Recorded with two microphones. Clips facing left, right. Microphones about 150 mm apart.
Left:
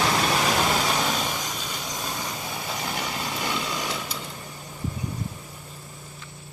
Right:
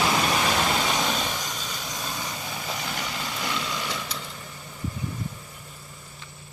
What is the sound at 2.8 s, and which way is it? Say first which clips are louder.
Vehicle: left 2 dB; 10° left (ahead or behind).